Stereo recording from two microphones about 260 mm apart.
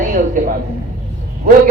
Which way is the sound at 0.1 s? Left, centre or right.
Right.